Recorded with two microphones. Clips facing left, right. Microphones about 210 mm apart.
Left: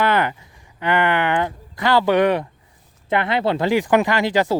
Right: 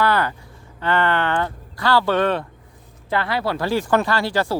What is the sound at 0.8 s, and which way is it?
Speech, 15° left (ahead or behind).